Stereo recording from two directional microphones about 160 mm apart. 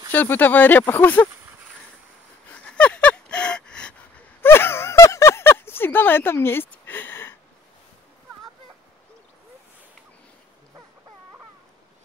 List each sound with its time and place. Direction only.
0.1 s speech: 10° left (ahead or behind)
2.5 s a sound: 10° left (ahead or behind)
4.4 s gasp: 15° left (ahead or behind)